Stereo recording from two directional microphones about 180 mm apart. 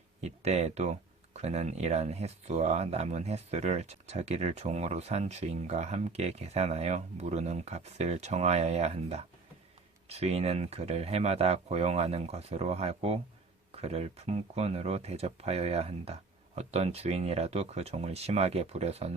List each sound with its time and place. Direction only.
0.2 s speech: 35° right (ahead or behind)